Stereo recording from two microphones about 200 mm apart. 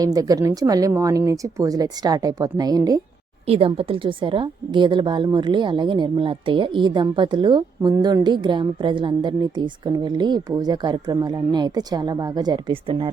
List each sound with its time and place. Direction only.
0.0 s speech: 20° right (ahead or behind)
3.4 s a woman's voice: 30° right (ahead or behind)